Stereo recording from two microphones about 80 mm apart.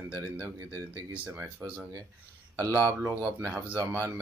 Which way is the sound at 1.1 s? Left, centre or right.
Right.